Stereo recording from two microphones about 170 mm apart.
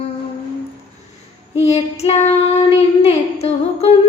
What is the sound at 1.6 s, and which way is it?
Child singing, 40° left (ahead or behind).